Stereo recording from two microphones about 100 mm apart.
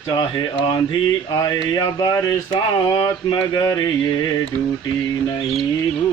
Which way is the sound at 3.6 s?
40° left (ahead or behind).